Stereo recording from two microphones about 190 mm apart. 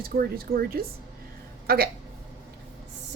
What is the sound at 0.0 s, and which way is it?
A woman's voice, 50° right (ahead or behind).